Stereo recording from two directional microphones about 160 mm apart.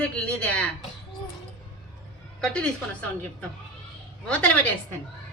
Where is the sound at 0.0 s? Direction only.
5° left (ahead or behind).